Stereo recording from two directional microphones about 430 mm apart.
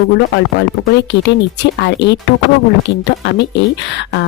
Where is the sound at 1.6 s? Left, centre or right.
Left.